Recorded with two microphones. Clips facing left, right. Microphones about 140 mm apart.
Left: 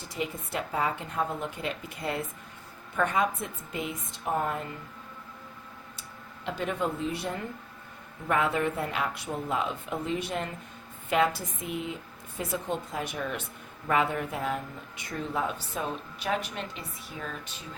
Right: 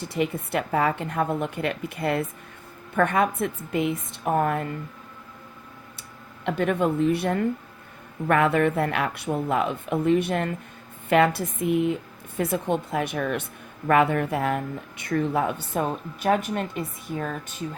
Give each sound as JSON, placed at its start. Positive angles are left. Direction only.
{"t": 0.0, "sound": "speech", "side_deg": -65}
{"t": 6.4, "sound": "speech", "side_deg": -60}